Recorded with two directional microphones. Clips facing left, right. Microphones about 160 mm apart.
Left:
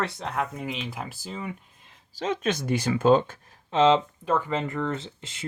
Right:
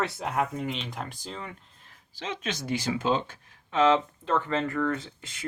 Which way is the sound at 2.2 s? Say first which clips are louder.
Left 7 dB; 50° left (ahead or behind).